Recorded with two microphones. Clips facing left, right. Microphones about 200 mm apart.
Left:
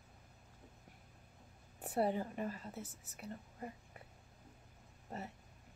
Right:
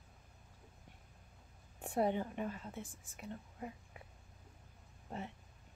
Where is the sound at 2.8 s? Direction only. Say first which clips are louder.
Even; 40° left (ahead or behind).